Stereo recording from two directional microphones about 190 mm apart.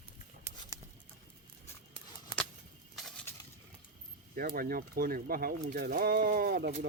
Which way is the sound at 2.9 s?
Centre (ahead or behind).